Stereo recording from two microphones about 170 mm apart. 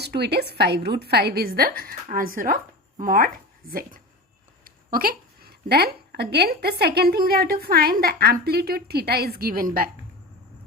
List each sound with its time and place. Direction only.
0.0 s a woman's voice: 75° right (ahead or behind); by 9.9 s 60° right (ahead or behind)